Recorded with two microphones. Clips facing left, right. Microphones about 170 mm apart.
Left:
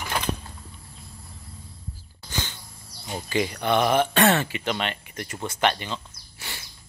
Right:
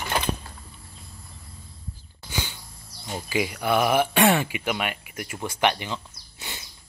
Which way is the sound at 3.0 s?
5° right (ahead or behind).